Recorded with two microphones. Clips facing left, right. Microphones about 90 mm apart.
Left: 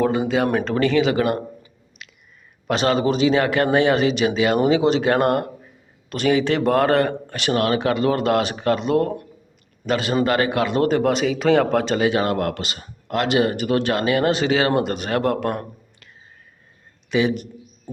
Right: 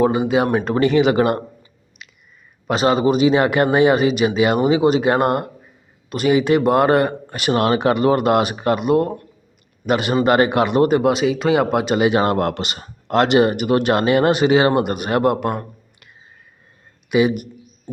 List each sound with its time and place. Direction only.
0.0 s speech: 15° right (ahead or behind)
1.1 s speech: 35° right (ahead or behind)
2.0 s a sound: centre (ahead or behind)
2.6 s speech: 10° right (ahead or behind)
7.5 s speech: 25° right (ahead or behind)
12.2 s speech: 30° right (ahead or behind); by 15.5 s 10° right (ahead or behind)
17.1 s speech: 10° right (ahead or behind)